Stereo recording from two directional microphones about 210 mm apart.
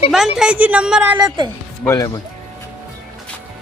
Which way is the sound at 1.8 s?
15° left (ahead or behind).